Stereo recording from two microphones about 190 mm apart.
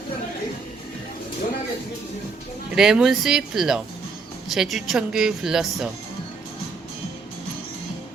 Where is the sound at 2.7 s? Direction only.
5° right (ahead or behind).